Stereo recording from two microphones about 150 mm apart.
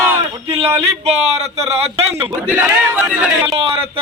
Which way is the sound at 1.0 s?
45° right (ahead or behind).